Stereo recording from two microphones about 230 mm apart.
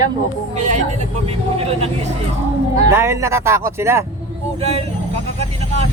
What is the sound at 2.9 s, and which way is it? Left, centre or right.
Speech, centre.